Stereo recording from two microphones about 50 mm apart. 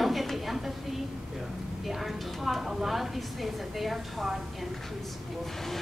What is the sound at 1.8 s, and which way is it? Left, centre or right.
A woman's voice, centre.